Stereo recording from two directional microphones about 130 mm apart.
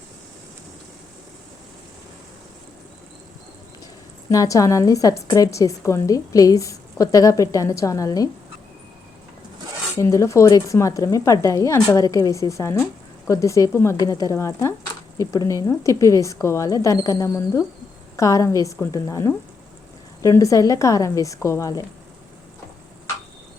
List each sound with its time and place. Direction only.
4.3 s speech: 25° left (ahead or behind)
10.0 s speech: 25° left (ahead or behind)